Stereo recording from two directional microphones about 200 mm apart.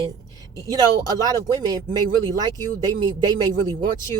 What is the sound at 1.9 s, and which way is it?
A woman's voice, 20° right (ahead or behind).